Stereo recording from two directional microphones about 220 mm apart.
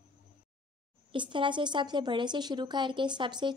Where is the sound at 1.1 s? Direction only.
20° right (ahead or behind).